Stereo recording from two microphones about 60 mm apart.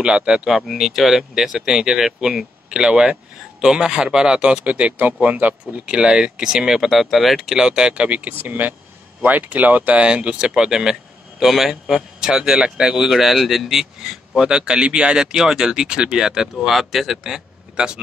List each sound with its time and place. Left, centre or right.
0.0 s speech: centre
0.5 s speech: centre
7.5 s speech: centre